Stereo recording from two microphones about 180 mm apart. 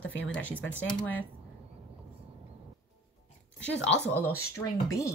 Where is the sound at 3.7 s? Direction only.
80° left.